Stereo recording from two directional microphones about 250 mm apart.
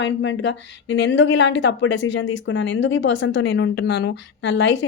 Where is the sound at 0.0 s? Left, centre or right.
Left.